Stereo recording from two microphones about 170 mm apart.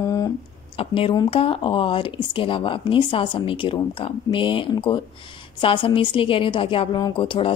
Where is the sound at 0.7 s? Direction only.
30° left (ahead or behind).